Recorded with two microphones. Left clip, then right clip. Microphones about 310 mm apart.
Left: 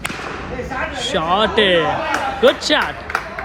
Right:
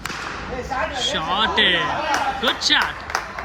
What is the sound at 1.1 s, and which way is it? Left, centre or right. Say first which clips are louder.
Speech: left 5 dB; centre.